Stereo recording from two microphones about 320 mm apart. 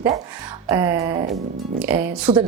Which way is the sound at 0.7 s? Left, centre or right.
Centre.